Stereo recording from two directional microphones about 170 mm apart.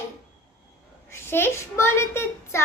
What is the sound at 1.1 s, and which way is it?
A child's voice, 15° left (ahead or behind).